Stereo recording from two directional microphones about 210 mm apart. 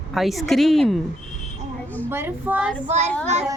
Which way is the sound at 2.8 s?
35° right (ahead or behind).